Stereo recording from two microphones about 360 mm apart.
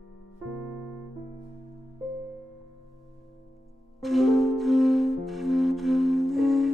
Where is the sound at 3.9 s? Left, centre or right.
Centre.